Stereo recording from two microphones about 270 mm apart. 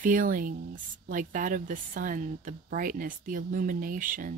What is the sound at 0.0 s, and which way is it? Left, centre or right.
Speech, right.